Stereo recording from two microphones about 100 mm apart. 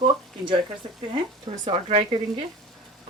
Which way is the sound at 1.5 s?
50° right (ahead or behind).